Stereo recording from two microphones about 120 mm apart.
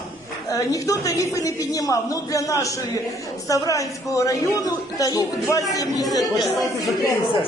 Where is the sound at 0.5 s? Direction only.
30° left (ahead or behind).